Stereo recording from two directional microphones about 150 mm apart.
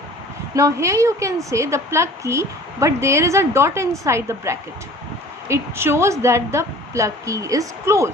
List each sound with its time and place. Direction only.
0.5 s a woman's voice: 20° right (ahead or behind)